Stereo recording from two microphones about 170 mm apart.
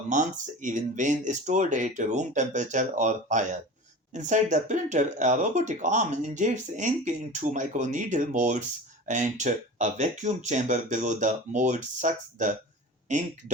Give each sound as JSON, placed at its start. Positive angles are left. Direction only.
{"t": 0.1, "sound": "speech", "side_deg": -45}